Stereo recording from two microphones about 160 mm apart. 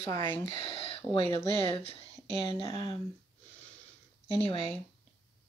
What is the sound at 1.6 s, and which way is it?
Speech, 35° left (ahead or behind).